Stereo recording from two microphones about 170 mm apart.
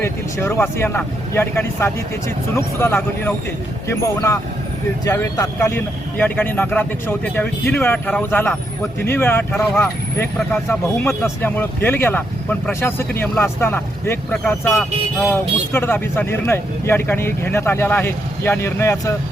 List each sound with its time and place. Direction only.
0.0 s speech: 15° left (ahead or behind)
15.3 s speech: 15° left (ahead or behind)